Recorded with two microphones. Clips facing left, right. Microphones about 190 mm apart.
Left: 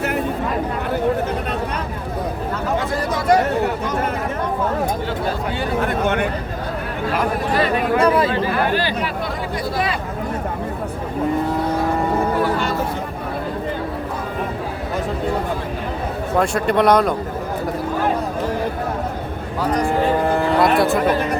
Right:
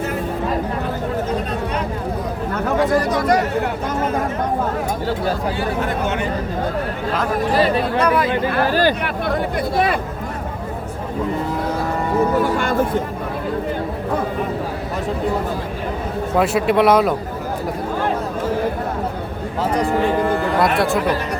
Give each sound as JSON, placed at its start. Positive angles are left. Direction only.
{"t": 7.9, "sound": "speech", "side_deg": 25}
{"t": 8.6, "sound": "speech", "side_deg": -45}
{"t": 12.5, "sound": "speech", "side_deg": -50}
{"t": 16.4, "sound": "speech", "side_deg": -5}
{"t": 20.6, "sound": "speech", "side_deg": 0}